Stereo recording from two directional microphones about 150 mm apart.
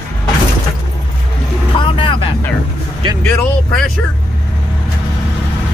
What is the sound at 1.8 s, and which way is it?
Vehicle, 35° left (ahead or behind).